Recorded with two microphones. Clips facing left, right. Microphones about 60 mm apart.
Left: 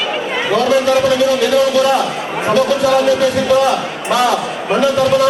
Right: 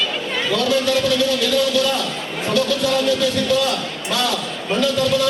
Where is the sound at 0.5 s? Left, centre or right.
Left.